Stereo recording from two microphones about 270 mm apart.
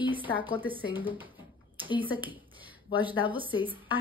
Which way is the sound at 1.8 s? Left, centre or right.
Centre.